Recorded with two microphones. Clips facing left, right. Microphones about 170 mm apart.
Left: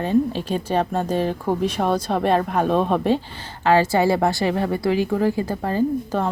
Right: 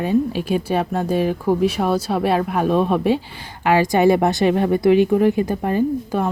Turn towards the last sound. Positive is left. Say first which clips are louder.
# right 1 dB
turn(degrees=-15)  # may be behind; listen again after turning